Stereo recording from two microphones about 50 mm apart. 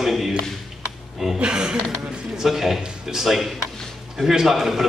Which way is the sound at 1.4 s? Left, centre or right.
Centre.